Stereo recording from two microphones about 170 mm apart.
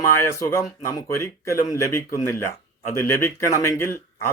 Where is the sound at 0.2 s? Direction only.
15° left (ahead or behind).